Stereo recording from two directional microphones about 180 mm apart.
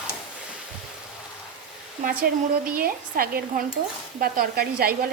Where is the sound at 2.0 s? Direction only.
55° right (ahead or behind).